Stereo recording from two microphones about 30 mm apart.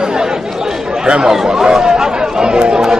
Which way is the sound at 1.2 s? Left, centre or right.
Right.